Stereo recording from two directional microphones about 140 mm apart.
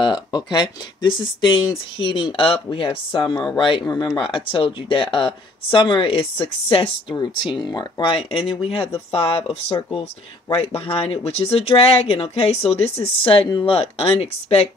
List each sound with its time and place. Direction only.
0.0 s speech: 30° left (ahead or behind); by 14.7 s 50° left (ahead or behind)